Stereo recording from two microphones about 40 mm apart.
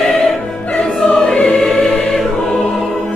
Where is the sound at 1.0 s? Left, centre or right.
Left.